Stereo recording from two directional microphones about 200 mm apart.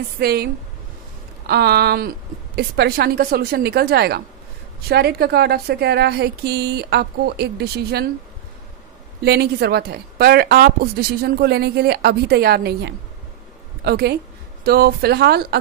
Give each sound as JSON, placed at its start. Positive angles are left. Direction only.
{"t": 0.2, "sound": "speech", "side_deg": -50}
{"t": 1.5, "sound": "speech", "side_deg": -55}
{"t": 9.2, "sound": "speech", "side_deg": -55}